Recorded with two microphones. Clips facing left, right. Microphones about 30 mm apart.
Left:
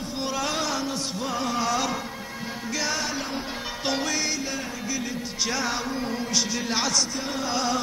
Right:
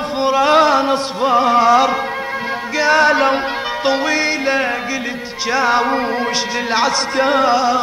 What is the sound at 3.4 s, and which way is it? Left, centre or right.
Music, right.